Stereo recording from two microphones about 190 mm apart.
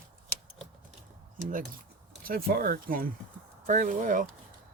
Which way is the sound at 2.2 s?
50° right (ahead or behind).